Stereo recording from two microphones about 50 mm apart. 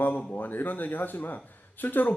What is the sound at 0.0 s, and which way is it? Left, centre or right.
Speech, left.